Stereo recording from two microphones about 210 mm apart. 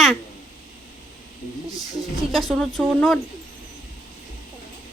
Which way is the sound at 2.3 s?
Centre (ahead or behind).